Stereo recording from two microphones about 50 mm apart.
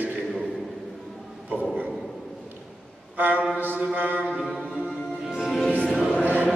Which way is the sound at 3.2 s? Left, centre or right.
Right.